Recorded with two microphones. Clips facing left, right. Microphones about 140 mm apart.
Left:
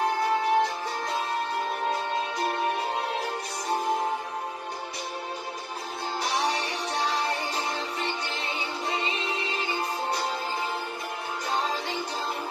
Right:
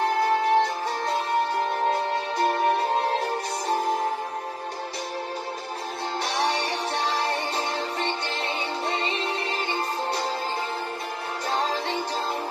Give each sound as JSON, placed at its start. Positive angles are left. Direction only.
{"t": 0.2, "sound": "music", "side_deg": -30}
{"t": 6.3, "sound": "music", "side_deg": -30}